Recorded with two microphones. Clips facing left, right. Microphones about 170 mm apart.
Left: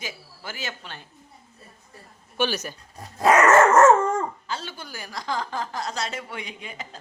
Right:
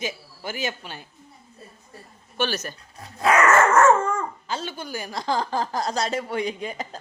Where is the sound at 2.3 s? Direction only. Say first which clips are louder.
Left 1 dB; 10° left (ahead or behind).